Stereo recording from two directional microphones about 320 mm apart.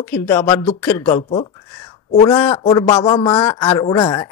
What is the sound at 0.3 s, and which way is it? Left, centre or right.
Speech, centre.